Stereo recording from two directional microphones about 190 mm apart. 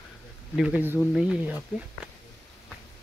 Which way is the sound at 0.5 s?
5° right (ahead or behind).